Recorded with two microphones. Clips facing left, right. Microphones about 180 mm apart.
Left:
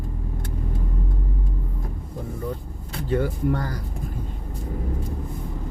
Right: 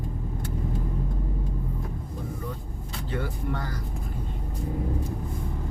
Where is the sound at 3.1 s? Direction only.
45° left (ahead or behind).